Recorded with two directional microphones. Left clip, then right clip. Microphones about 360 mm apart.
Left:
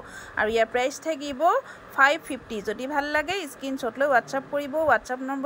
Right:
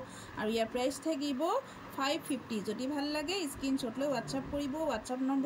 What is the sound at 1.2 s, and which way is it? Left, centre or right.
Speech, centre.